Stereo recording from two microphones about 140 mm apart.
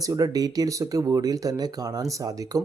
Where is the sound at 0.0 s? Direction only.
25° right (ahead or behind).